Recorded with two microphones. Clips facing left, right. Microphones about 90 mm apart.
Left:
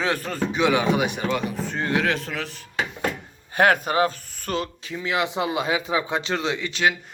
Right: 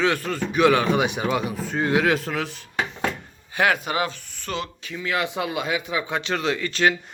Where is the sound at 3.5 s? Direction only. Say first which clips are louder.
Left 3 dB; 45° left (ahead or behind); by 6.9 s 15° left (ahead or behind).